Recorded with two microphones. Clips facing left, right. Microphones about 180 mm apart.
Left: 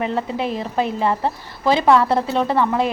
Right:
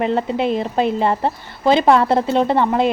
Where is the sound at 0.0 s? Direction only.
25° right (ahead or behind).